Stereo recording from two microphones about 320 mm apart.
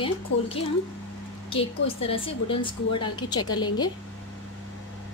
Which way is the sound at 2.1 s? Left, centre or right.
Centre.